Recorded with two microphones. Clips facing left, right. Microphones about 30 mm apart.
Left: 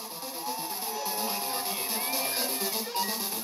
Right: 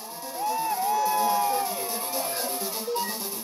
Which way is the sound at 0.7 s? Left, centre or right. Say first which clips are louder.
Right 10 dB; right.